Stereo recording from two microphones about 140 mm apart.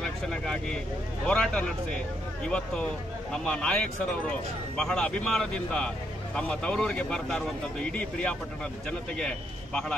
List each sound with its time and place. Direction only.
0.3 s speech: 5° left (ahead or behind)
4.7 s speech: 5° left (ahead or behind)